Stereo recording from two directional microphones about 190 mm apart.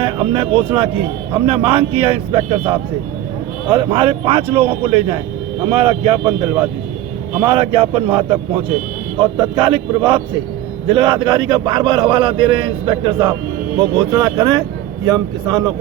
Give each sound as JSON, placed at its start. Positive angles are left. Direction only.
{"t": 0.0, "sound": "a man's voice", "side_deg": -30}
{"t": 3.8, "sound": "a man's voice", "side_deg": -25}
{"t": 7.5, "sound": "a man's voice", "side_deg": -25}